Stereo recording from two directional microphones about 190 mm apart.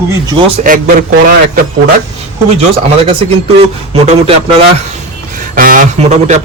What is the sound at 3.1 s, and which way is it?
Speech, 30° right (ahead or behind).